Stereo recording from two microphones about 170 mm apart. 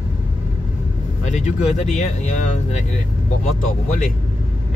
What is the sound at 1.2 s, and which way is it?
Speech, 45° left (ahead or behind).